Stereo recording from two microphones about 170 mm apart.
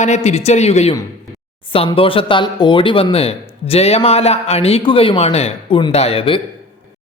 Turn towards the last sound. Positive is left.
turn(degrees=30)  # may be behind; listen again after turning